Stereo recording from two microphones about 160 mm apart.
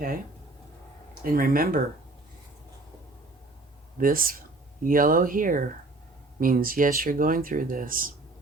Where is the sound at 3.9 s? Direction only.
60° right (ahead or behind).